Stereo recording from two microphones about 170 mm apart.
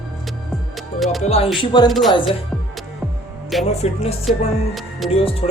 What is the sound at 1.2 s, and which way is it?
Music, 40° left (ahead or behind).